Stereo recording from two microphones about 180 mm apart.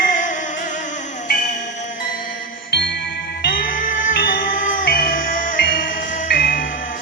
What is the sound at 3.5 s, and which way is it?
Music, 50° left (ahead or behind).